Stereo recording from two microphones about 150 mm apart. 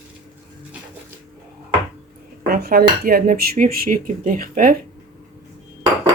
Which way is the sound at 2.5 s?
85° right.